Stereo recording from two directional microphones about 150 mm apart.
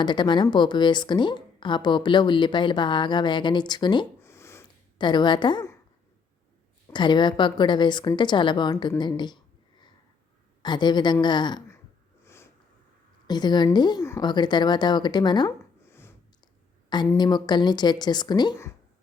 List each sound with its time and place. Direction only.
0.0 s a woman's voice: 30° left (ahead or behind)
4.2 s a sound: 15° left (ahead or behind)
4.9 s a woman's voice: 30° left (ahead or behind)
6.9 s a woman's voice: 30° left (ahead or behind)
10.6 s a woman's voice: 30° left (ahead or behind)
12.2 s sniff: 15° left (ahead or behind)
13.2 s a woman's voice: 30° left (ahead or behind)
15.9 s a sound: 15° left (ahead or behind)
17.2 s speech: 30° left (ahead or behind)